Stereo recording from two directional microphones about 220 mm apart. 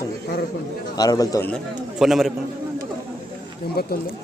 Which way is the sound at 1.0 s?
15° left (ahead or behind).